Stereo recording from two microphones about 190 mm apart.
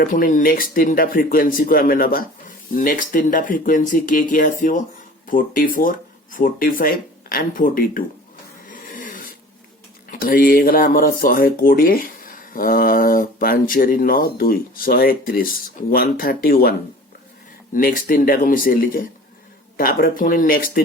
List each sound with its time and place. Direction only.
0.0 s speech: 45° left (ahead or behind)
8.6 s a sound: 45° left (ahead or behind)
10.1 s speech: 50° left (ahead or behind)
17.7 s speech: 45° left (ahead or behind)